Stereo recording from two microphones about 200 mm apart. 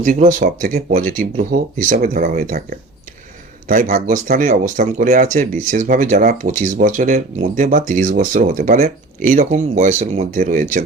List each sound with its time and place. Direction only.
0.0 s speech: 40° right (ahead or behind)